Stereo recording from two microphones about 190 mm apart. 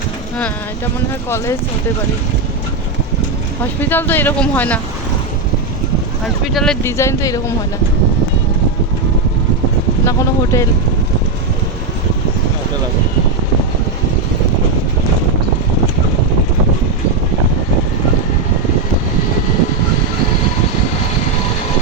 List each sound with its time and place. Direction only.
3.6 s speech: 10° left (ahead or behind)
6.2 s speech: centre (ahead or behind)
6.8 s speech: 15° left (ahead or behind)
10.1 s speech: 15° left (ahead or behind)